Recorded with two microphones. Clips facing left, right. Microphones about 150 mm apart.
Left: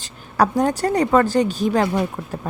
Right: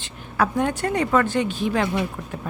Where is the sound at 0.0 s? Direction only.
35° left (ahead or behind).